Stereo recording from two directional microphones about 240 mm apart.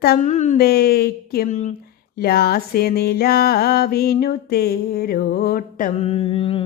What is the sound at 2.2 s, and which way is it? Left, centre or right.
Music, left.